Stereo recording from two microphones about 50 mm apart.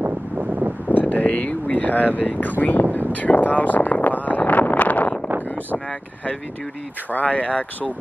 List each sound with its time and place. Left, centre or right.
0.0 s wind noise: right
0.8 s speech: left
3.1 s a sound: left
7.1 s speech: left